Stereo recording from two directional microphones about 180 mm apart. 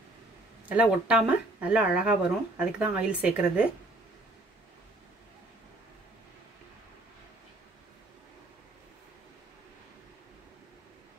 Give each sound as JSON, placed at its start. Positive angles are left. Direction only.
{"t": 0.7, "sound": "speech", "side_deg": -5}